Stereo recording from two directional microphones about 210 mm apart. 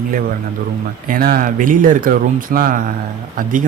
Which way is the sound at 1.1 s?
45° right (ahead or behind).